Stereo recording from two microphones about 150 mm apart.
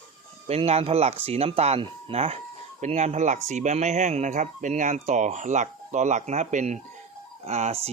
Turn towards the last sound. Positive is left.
turn(degrees=-45)  # may be behind; listen again after turning